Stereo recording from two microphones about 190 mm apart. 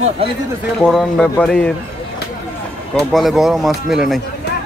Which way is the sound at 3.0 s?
Centre (ahead or behind).